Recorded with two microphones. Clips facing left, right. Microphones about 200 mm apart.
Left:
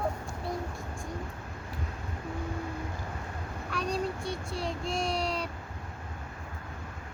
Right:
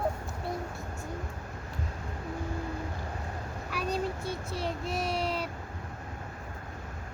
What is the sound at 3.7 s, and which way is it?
Child singing, 5° right (ahead or behind).